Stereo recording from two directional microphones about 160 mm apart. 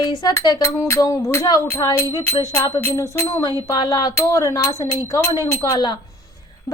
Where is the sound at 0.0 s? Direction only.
20° left (ahead or behind).